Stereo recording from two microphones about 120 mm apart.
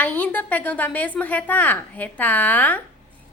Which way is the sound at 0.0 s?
15° left (ahead or behind).